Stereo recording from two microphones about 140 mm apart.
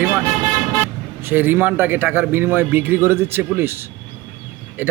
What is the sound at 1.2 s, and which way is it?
A man's voice, 15° right (ahead or behind).